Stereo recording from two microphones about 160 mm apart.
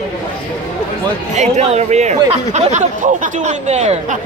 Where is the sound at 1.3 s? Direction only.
45° right (ahead or behind).